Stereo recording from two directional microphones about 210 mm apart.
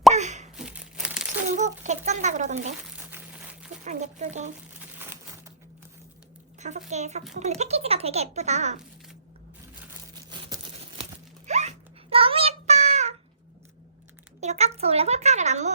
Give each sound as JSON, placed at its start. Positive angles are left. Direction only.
{"t": 0.1, "sound": "plop", "side_deg": -35}
{"t": 0.5, "sound": "crumpling", "side_deg": -5}
{"t": 1.5, "sound": "a sound", "side_deg": -35}
{"t": 2.0, "sound": "speech", "side_deg": -35}
{"t": 3.0, "sound": "crumpling", "side_deg": -10}
{"t": 3.8, "sound": "speech", "side_deg": -35}
{"t": 4.9, "sound": "crumpling", "side_deg": -10}
{"t": 6.6, "sound": "speech", "side_deg": -35}
{"t": 10.2, "sound": "a sound", "side_deg": -25}
{"t": 12.1, "sound": "child singing", "side_deg": -25}
{"t": 14.4, "sound": "speech", "side_deg": -30}